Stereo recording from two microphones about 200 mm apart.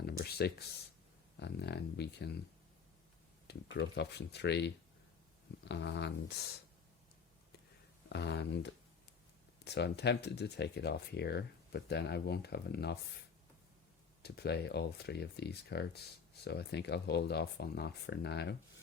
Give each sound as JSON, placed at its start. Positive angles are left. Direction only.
{"t": 0.0, "sound": "speech", "side_deg": 50}
{"t": 3.4, "sound": "speech", "side_deg": 55}
{"t": 8.1, "sound": "speech", "side_deg": 60}
{"t": 14.2, "sound": "speech", "side_deg": 55}